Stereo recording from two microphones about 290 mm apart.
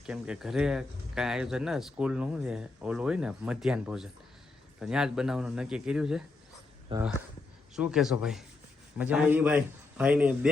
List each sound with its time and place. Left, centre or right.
0.0 s speech: centre
6.9 s speech: centre
7.8 s speech: centre